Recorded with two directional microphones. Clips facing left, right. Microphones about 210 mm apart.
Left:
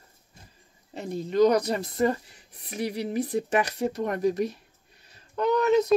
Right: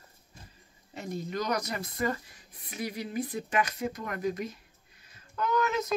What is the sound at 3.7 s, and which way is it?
Speech, 35° left (ahead or behind).